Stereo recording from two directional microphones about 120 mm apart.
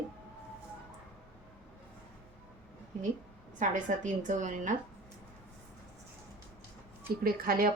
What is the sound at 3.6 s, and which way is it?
A woman's voice, 90° right.